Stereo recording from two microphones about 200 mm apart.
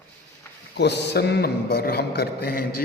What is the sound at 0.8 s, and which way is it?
A man's voice, 55° left (ahead or behind).